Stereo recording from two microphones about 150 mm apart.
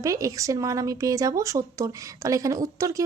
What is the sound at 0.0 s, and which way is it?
A woman's voice, 20° right (ahead or behind).